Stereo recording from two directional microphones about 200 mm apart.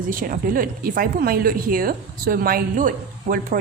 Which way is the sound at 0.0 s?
45° right (ahead or behind).